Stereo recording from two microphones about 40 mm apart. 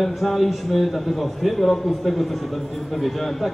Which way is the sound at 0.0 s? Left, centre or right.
Centre.